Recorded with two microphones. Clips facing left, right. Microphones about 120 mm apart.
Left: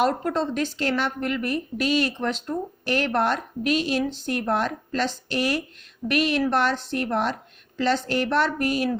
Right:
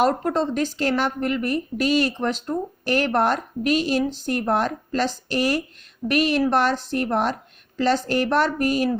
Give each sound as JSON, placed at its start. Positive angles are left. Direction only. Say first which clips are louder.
{"t": 0.0, "sound": "a woman's voice", "louder": "right 2 dB", "side_deg": -40}